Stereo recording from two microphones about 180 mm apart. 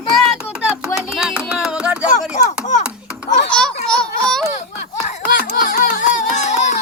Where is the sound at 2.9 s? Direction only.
5° right (ahead or behind).